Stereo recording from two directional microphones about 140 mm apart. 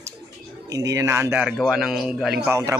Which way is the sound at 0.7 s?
25° right (ahead or behind).